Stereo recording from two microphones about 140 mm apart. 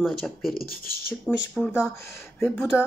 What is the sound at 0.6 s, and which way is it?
Speech, 90° left.